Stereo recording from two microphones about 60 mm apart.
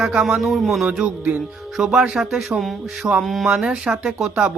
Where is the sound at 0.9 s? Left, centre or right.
Right.